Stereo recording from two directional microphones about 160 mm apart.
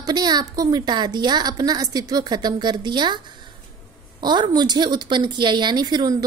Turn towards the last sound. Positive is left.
turn(degrees=-25)  # may be behind; listen again after turning